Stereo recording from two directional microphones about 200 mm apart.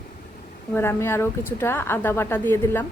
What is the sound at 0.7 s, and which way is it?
A woman's voice, 10° left (ahead or behind).